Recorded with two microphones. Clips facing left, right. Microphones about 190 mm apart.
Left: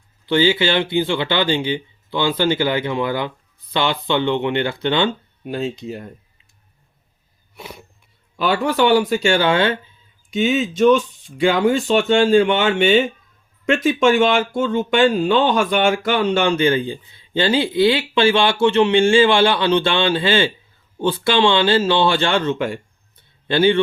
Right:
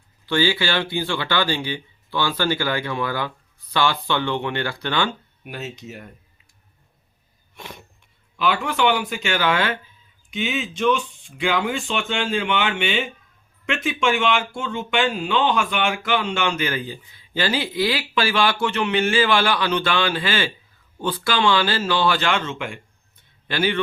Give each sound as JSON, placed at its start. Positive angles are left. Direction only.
{"t": 0.3, "sound": "speech", "side_deg": 20}
{"t": 7.5, "sound": "a sound", "side_deg": 5}
{"t": 8.4, "sound": "speech", "side_deg": 40}
{"t": 10.3, "sound": "speech", "side_deg": 40}
{"t": 23.5, "sound": "speech", "side_deg": 30}